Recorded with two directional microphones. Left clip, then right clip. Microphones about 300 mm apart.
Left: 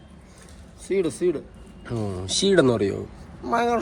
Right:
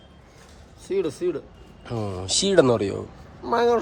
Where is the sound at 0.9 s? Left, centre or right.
Centre.